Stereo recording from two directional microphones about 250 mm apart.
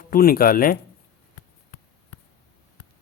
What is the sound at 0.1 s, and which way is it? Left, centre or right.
Speech, left.